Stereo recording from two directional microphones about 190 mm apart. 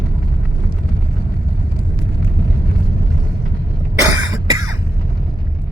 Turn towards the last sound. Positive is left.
turn(degrees=-20)  # may be behind; listen again after turning